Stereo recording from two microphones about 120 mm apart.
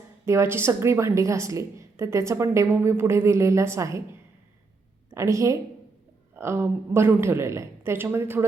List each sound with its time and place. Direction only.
0.3 s a woman's voice: 20° right (ahead or behind)
5.1 s a woman's voice: 25° right (ahead or behind)